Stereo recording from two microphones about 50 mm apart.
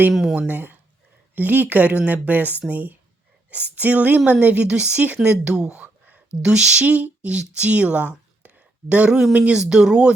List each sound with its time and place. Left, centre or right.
0.1 s speech: centre
0.3 s speech: right; by 5.8 s centre
5.8 s a sound: right
6.8 s speech: right
9.0 s speech: centre